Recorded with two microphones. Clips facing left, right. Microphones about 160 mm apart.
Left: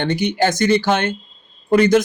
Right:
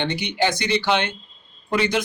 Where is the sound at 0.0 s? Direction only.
45° left (ahead or behind).